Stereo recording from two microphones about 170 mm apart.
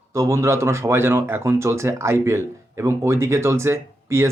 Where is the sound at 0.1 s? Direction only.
15° right (ahead or behind).